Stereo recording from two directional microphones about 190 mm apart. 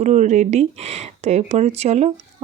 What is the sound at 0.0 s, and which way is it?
Speech, 40° right (ahead or behind).